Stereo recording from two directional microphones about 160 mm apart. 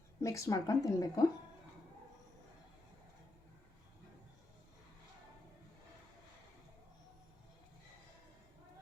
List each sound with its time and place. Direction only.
0.2 s a woman's voice: 20° left (ahead or behind)